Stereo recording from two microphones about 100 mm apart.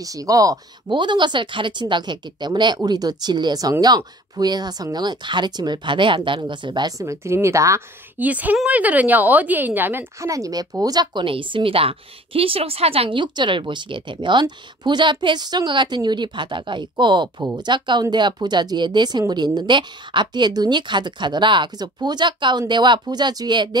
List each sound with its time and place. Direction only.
0.0 s speech: 35° right (ahead or behind)
0.8 s a woman's voice: 50° right (ahead or behind)
7.0 s a woman's voice: 30° right (ahead or behind)
8.2 s speech: 15° right (ahead or behind)
10.2 s speech: 35° right (ahead or behind)
11.2 s a woman's voice: 60° right (ahead or behind)